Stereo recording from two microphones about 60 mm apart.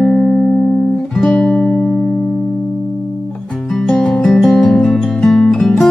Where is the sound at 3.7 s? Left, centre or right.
Centre.